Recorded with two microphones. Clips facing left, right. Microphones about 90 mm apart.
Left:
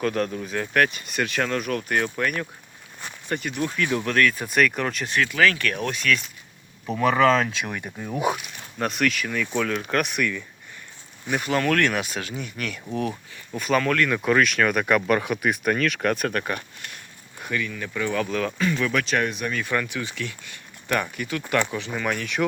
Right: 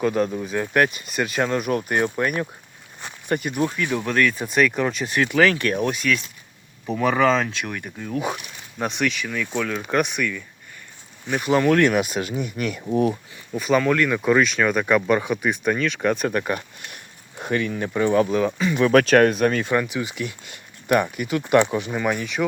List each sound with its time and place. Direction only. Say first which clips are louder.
0.0 s speech: right 3 dB; 10° right (ahead or behind)
0.9 s speech: right 2 dB; 5° right (ahead or behind); by 2.5 s 20° right (ahead or behind)
3.0 s a sound: right 4 dB; 20° right (ahead or behind)
3.8 s speech: left 3 dB; 5° right (ahead or behind)
5.2 s speech: right 3 dB; 25° right (ahead or behind)
5.9 s speech: right 1 dB; 10° right (ahead or behind)
7.5 s speech: even; 10° left (ahead or behind)
11.4 s speech: right 5 dB; 15° right (ahead or behind)
13.5 s speech: right 3 dB; 5° right (ahead or behind)
16.5 s a sound: right 3 dB; 20° right (ahead or behind)
17.5 s speech: right 5 dB; 35° right (ahead or behind); by 18.6 s 15° right (ahead or behind)
18.9 s speech: right 9 dB; 50° right (ahead or behind)
19.6 s speech: right 4 dB; 20° right (ahead or behind)